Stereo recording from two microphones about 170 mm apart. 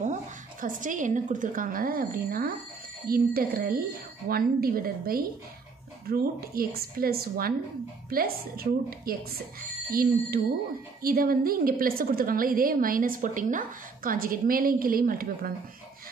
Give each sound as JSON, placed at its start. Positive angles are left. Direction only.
{"t": 0.0, "sound": "a woman's voice", "side_deg": -50}
{"t": 11.0, "sound": "a woman's voice", "side_deg": -60}